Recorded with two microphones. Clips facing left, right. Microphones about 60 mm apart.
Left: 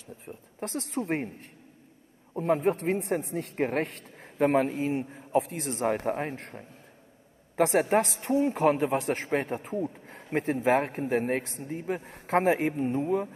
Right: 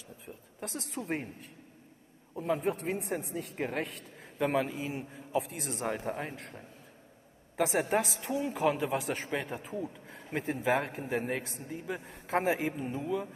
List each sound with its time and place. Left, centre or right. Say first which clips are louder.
0.7 s speech: left 6 dB; left
2.4 s speech: left 6 dB; left
3.5 s speech: left 7 dB; left
4.6 s a man's voice: left 6 dB; left
5.5 s speech: left 6 dB; left
7.5 s speech: left 5 dB; left